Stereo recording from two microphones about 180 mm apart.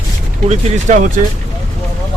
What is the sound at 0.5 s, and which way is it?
Speech, 45° right (ahead or behind).